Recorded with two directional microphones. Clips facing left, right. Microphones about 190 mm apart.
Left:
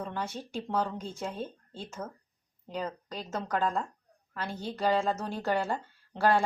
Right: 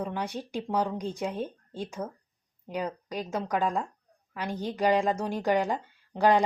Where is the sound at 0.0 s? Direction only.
15° right (ahead or behind).